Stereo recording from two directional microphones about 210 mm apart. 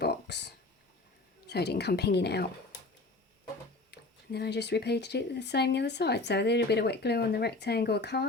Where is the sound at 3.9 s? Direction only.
50° left (ahead or behind).